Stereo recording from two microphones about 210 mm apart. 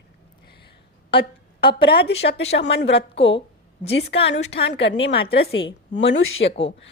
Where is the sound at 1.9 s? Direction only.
50° left (ahead or behind).